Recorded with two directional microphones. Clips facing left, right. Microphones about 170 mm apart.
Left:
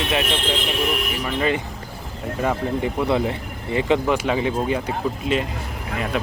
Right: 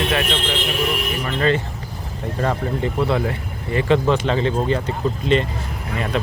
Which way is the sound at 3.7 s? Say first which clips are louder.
Right 2 dB; 15° left (ahead or behind).